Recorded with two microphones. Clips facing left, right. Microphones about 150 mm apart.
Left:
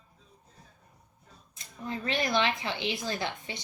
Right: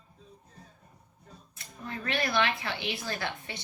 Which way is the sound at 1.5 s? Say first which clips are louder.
Left 3 dB; 20° left (ahead or behind).